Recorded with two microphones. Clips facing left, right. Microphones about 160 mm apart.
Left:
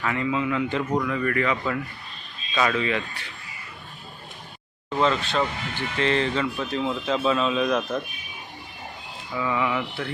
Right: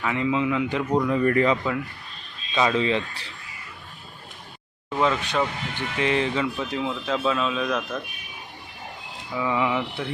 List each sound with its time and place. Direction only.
0.0 s speech: 15° right (ahead or behind)
1.0 s speech: 30° right (ahead or behind)
2.6 s speech: 20° right (ahead or behind)
4.9 s speech: 10° right (ahead or behind)
6.8 s speech: centre (ahead or behind)
7.8 s speech: 20° left (ahead or behind)
9.3 s speech: 15° right (ahead or behind)